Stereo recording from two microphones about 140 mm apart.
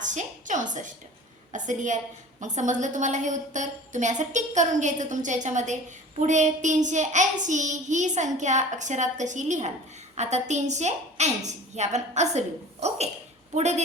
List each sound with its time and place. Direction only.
0.0 s a woman's voice: 65° right (ahead or behind)
1.5 s child singing: 60° right (ahead or behind)
13.6 s speech: 55° right (ahead or behind)